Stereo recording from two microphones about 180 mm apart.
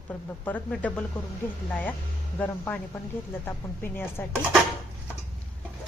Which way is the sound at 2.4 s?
10° left (ahead or behind).